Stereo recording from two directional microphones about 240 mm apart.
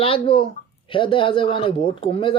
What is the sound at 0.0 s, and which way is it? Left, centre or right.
Speech, left.